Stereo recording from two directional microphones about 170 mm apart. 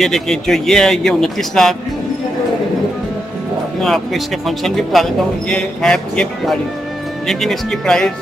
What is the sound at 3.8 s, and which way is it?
Speech, centre (ahead or behind).